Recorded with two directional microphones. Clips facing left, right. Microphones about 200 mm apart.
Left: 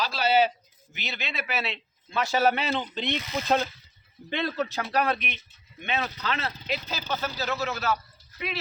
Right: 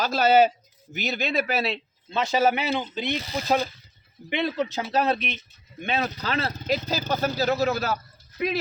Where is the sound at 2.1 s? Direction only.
20° right (ahead or behind).